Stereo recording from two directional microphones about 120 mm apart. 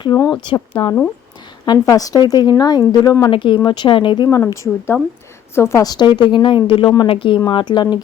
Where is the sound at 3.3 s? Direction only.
45° left (ahead or behind).